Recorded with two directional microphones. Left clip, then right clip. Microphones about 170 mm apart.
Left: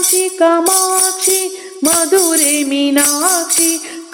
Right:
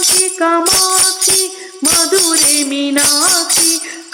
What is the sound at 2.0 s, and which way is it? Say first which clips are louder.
Music: even; 40° left (ahead or behind).